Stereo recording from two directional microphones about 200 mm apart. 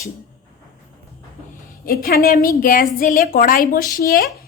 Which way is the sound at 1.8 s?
45° left (ahead or behind).